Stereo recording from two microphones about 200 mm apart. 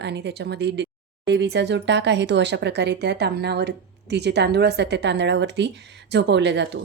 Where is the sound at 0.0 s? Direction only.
60° right (ahead or behind).